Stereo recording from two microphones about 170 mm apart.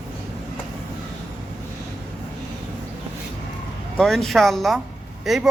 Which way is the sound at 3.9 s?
Centre (ahead or behind).